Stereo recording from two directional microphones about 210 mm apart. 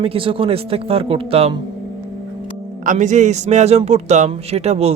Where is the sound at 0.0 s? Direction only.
25° right (ahead or behind).